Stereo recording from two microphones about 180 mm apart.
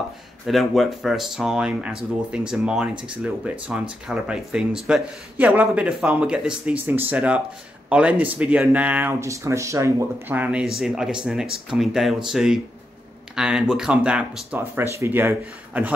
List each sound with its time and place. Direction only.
0.5 s speech: centre (ahead or behind)